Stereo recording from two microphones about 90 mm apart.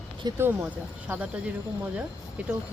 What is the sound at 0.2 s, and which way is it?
Speech, 50° right (ahead or behind).